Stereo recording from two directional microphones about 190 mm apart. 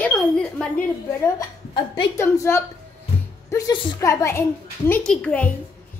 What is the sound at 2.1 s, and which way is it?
A child's voice, 15° left (ahead or behind).